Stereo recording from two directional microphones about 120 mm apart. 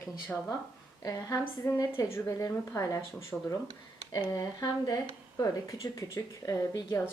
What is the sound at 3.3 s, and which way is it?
Speech, 10° left (ahead or behind).